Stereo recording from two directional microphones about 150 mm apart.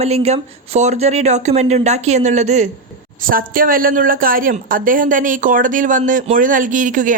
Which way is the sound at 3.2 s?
70° right (ahead or behind).